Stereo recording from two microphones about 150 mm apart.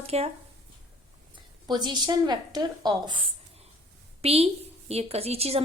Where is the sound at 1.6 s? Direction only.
30° right (ahead or behind).